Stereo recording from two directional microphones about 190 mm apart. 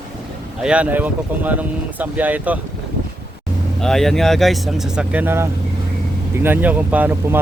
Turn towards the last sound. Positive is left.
turn(degrees=-10)  # may be behind; listen again after turning